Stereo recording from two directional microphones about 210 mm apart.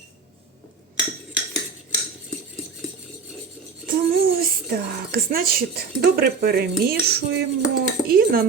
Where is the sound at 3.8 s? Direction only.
40° right (ahead or behind).